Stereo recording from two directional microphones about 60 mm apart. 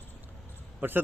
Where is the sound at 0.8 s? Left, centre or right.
Right.